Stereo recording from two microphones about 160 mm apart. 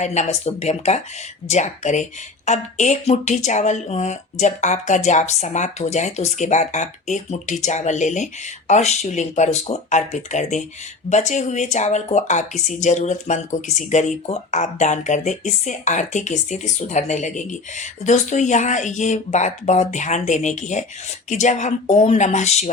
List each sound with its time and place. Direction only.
0.0 s speech: 45° left (ahead or behind)